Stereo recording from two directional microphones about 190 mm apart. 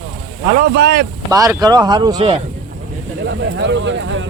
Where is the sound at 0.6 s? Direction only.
55° right (ahead or behind).